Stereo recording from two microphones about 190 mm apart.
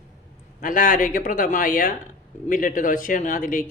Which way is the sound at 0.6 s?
45° left (ahead or behind).